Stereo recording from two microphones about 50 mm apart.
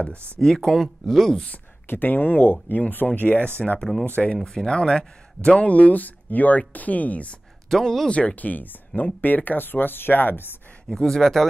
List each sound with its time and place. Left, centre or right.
0.4 s speech: centre
1.9 s speech: left
4.4 s speech: centre; by 7.3 s left
7.7 s speech: centre
8.1 s speech: left
10.9 s speech: centre